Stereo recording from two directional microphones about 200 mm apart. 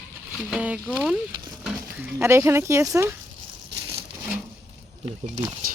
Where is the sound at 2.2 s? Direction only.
10° right (ahead or behind).